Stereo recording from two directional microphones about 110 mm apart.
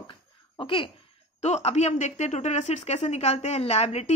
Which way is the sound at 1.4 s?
90° left.